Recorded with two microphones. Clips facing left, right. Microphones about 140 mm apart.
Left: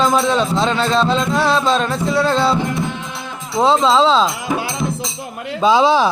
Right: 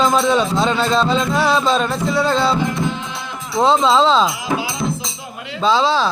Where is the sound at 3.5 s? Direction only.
Centre (ahead or behind).